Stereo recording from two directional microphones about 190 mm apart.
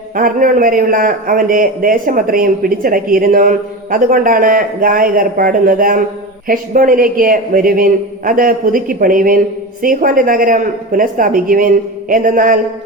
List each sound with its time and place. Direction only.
0.2 s a man's voice: 45° right (ahead or behind)